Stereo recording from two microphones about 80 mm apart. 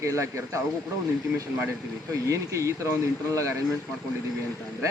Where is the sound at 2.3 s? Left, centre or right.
Right.